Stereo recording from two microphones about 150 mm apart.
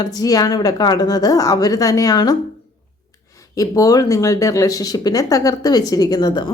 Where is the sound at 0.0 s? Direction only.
25° left (ahead or behind).